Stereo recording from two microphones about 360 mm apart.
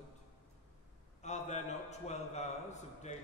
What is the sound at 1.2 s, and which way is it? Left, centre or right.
A man's voice, centre.